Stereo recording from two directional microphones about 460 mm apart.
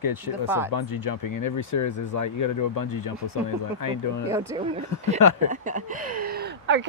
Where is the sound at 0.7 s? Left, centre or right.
Left.